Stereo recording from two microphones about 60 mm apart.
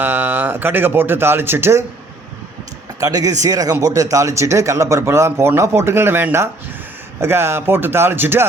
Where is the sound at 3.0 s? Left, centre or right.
Right.